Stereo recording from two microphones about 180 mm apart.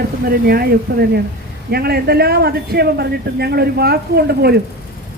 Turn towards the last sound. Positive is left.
turn(degrees=-60)  # may be behind; listen again after turning